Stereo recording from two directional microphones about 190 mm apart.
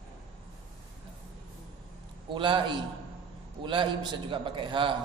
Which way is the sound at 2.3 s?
25° right (ahead or behind).